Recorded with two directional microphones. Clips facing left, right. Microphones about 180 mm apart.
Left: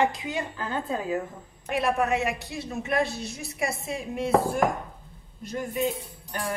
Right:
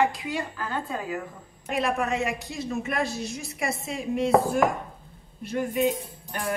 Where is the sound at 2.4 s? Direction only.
60° left (ahead or behind).